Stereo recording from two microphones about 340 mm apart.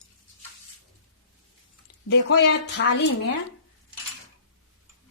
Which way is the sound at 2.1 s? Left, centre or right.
Left.